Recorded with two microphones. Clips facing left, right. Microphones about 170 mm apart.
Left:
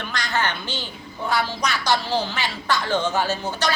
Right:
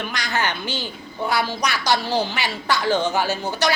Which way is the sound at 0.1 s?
10° right (ahead or behind).